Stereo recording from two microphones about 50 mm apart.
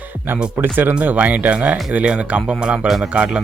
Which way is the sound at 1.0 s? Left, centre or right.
Right.